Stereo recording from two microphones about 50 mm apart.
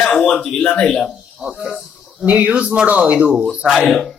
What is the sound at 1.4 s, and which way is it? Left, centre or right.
Speech, centre.